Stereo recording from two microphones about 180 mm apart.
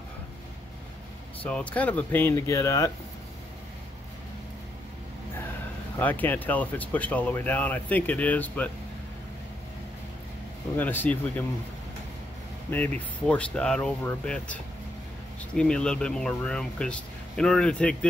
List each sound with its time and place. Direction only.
1.4 s speech: 10° left (ahead or behind)
5.9 s speech: 10° left (ahead or behind)
10.8 s speech: 10° left (ahead or behind)
12.7 s speech: 10° left (ahead or behind)